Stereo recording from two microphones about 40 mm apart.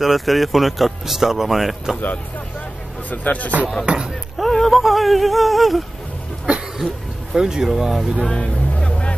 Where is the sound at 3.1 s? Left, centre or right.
Left.